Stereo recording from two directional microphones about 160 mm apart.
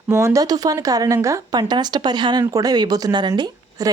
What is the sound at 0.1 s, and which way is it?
Speech, 20° right (ahead or behind).